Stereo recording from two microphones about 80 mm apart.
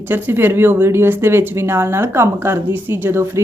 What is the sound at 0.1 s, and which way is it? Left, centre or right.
Speech, right.